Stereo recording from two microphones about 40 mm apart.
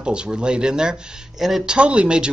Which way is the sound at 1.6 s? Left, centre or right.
Right.